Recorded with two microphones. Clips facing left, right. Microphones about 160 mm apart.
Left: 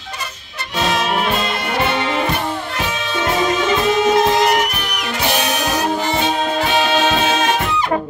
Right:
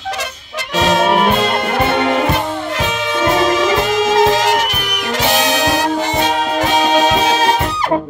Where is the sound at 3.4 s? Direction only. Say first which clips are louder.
Right 1 dB; 90° right.